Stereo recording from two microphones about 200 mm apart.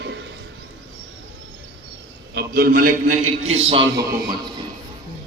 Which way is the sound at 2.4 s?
50° right (ahead or behind).